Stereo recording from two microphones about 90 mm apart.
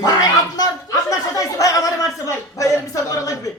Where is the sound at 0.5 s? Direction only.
40° left (ahead or behind).